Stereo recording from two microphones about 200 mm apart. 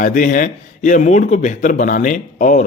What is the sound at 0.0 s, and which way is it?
Speech, 40° left (ahead or behind).